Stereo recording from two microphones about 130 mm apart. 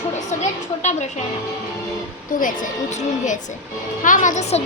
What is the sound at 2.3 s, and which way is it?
Speech, 90° left.